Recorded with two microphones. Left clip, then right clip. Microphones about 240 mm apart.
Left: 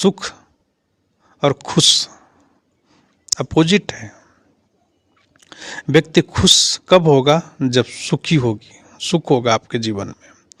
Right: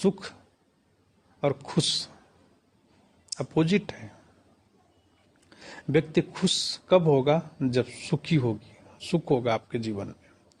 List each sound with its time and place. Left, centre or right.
0.0 s speech: left
1.4 s speech: left
3.2 s speech: left
5.5 s speech: left